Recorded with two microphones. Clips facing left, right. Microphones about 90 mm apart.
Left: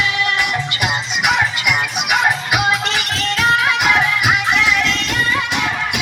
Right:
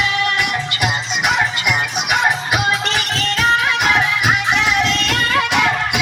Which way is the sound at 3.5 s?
10° left (ahead or behind).